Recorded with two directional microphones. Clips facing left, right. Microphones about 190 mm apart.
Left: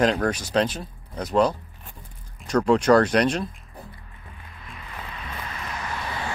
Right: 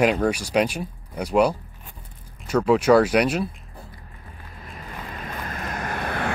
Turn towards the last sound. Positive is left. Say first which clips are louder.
# right 4 dB
turn(degrees=-55)  # may be behind; listen again after turning